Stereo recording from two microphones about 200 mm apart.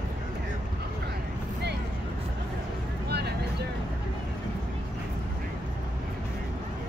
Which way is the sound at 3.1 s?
55° right (ahead or behind).